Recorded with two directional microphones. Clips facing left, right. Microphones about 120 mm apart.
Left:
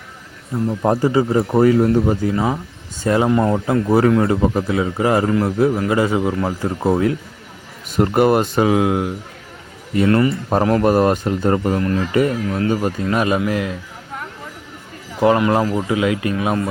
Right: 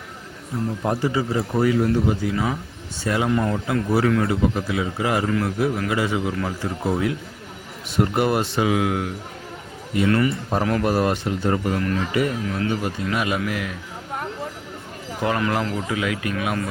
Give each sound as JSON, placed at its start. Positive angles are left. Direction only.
{"t": 0.8, "sound": "a man's voice", "side_deg": 45}
{"t": 2.0, "sound": "a man's voice", "side_deg": 40}
{"t": 8.7, "sound": "a man's voice", "side_deg": 30}
{"t": 11.7, "sound": "a man's voice", "side_deg": 35}
{"t": 15.2, "sound": "speech", "side_deg": 25}